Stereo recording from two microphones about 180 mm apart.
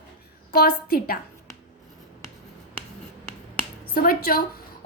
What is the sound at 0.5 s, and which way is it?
Speech, 60° left (ahead or behind).